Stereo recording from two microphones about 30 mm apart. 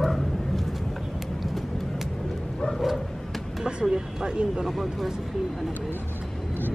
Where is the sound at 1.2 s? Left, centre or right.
Centre.